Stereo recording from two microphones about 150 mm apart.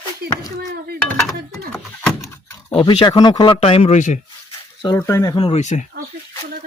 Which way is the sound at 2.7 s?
35° left (ahead or behind).